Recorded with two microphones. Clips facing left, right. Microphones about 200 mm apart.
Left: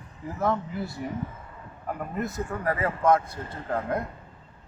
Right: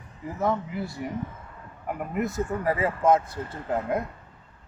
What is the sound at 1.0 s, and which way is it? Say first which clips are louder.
A man's voice: even; 10° right (ahead or behind).